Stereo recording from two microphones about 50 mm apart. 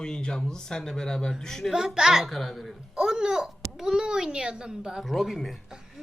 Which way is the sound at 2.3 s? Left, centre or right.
Centre.